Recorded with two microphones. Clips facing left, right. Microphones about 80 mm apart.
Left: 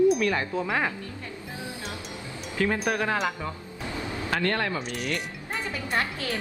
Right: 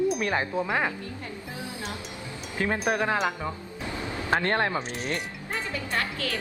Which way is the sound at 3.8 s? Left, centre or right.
Left.